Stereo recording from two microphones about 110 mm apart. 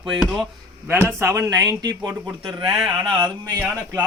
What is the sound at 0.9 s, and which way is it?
Speech, 20° right (ahead or behind).